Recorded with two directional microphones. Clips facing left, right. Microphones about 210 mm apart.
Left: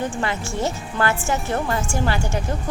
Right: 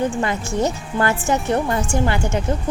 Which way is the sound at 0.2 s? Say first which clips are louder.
Right 4 dB; 20° right (ahead or behind).